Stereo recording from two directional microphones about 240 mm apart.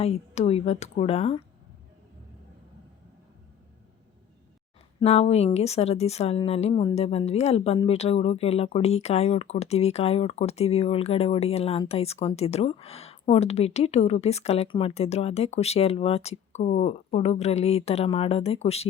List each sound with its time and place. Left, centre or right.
0.0 s a woman's voice: left
4.9 s a woman's voice: left